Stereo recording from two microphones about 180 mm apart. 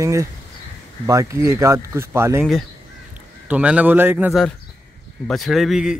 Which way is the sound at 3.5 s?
5° right (ahead or behind).